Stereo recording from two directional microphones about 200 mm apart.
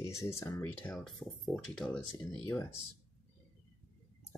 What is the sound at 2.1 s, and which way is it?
Speech, 15° left (ahead or behind).